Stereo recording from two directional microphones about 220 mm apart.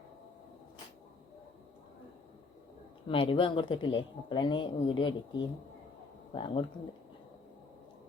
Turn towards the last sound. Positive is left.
turn(degrees=20)  # may be behind; listen again after turning